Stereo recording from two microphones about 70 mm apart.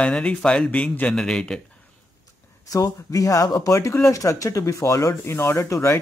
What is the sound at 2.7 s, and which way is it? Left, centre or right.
Speech, left.